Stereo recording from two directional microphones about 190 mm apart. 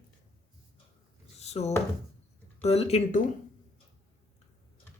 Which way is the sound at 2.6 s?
35° left (ahead or behind).